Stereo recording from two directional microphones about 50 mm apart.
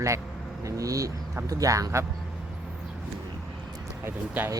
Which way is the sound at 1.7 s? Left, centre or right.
Right.